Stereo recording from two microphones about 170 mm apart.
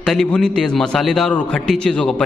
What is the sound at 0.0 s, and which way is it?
A man's voice, centre (ahead or behind).